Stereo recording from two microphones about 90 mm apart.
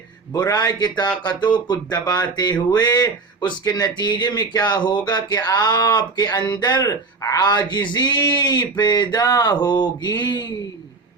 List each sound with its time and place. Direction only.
0.3 s music: 45° left (ahead or behind)